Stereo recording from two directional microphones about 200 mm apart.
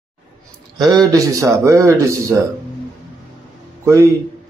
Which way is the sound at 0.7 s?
20° right (ahead or behind).